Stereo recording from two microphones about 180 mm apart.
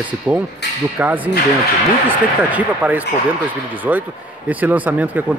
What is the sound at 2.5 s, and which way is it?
Speech, 10° right (ahead or behind).